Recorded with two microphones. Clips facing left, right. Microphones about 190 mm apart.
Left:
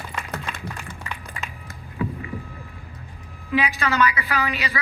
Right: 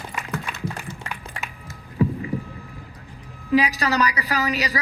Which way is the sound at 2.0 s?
40° right (ahead or behind).